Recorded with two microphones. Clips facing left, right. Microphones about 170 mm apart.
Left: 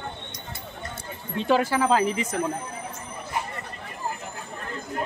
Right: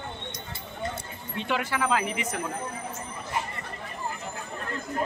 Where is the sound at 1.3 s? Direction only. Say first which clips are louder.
Left 7 dB; 35° left (ahead or behind).